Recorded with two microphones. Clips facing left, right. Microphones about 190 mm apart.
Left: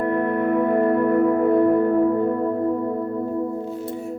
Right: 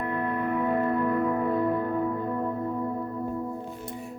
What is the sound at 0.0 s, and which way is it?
Music, 55° left (ahead or behind).